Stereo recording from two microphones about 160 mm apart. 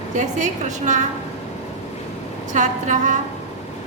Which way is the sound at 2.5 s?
50° right (ahead or behind).